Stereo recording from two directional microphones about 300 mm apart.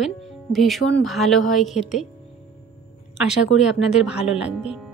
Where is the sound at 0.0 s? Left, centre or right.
Centre.